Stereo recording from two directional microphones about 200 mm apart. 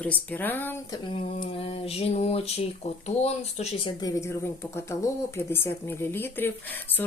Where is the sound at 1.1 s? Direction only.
30° left (ahead or behind).